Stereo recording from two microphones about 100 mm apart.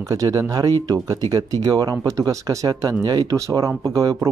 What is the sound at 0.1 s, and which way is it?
Speech, 35° right (ahead or behind).